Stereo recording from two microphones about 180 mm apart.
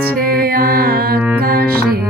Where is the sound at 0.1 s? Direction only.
55° right (ahead or behind).